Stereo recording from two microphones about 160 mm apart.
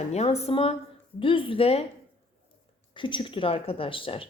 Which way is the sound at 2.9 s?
30° left (ahead or behind).